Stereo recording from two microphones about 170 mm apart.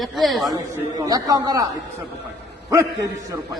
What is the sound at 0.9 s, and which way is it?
A man's voice, 20° right (ahead or behind).